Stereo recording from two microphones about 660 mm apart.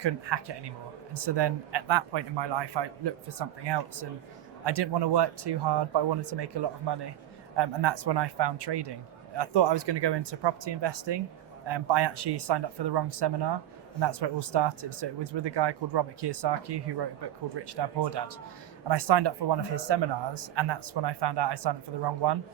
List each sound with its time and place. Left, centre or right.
0.0 s a man's voice: right